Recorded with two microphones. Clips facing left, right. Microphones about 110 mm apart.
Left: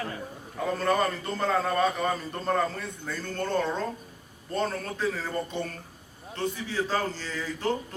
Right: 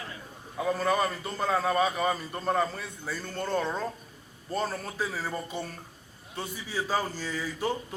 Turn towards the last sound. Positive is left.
turn(degrees=-10)  # may be behind; listen again after turning